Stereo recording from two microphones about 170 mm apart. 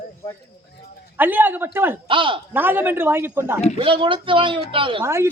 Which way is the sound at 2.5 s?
10° right (ahead or behind).